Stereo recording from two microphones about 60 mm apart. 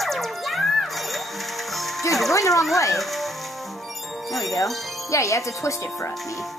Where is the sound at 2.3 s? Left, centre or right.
Left.